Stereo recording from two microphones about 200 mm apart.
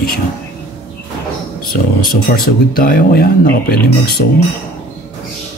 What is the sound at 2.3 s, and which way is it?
Speech, 45° left (ahead or behind).